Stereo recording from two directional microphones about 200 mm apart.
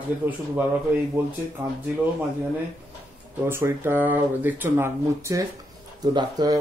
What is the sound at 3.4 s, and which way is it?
Speech, 10° right (ahead or behind).